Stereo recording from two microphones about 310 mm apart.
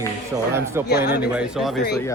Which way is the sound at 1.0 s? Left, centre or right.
Left.